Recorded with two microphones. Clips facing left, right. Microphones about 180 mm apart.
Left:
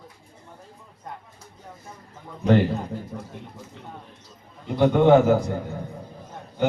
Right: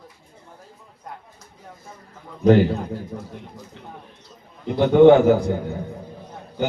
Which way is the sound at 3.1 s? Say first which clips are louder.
Right 2 dB; 10° right (ahead or behind).